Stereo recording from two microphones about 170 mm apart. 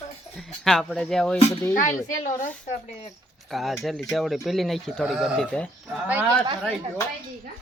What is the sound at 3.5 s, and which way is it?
Speech, centre (ahead or behind).